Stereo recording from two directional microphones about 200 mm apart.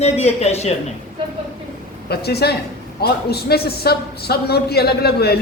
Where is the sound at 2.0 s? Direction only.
55° left (ahead or behind).